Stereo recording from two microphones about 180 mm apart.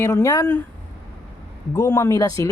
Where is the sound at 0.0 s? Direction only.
15° left (ahead or behind).